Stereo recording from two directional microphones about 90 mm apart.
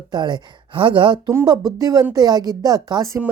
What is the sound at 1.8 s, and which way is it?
A woman's voice, 40° right (ahead or behind).